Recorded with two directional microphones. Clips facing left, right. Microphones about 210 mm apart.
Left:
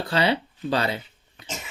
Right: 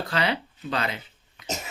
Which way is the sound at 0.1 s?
30° left (ahead or behind).